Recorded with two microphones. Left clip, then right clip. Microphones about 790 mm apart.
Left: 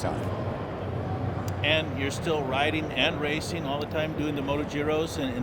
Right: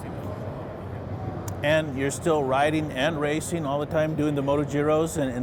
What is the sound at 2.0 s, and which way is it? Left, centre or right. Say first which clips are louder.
Speech: right 4 dB; right.